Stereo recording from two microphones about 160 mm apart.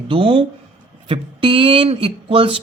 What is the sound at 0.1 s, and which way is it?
A man's voice, 35° right (ahead or behind).